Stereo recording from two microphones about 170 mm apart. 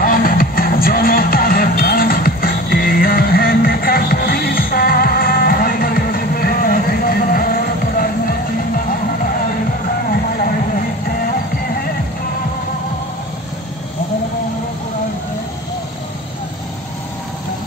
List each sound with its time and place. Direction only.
0.0 s music: 55° left (ahead or behind)